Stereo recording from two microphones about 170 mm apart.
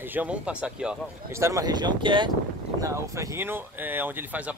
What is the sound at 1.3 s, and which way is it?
Speech, 15° right (ahead or behind).